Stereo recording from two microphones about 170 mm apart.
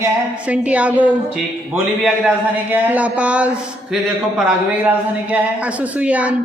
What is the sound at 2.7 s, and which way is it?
A man's voice, 10° right (ahead or behind).